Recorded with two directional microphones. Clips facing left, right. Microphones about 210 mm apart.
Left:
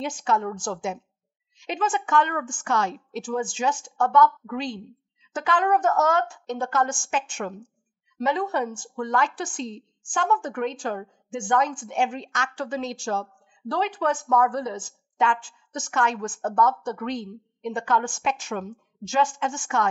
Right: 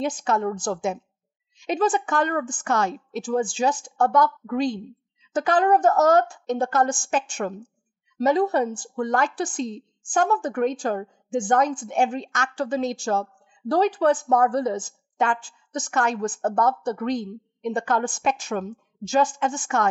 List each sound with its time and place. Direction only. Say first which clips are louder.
0.2 s a woman's voice: right 2 dB; 40° right (ahead or behind)